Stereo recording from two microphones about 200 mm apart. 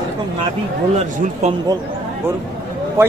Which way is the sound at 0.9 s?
30° right (ahead or behind).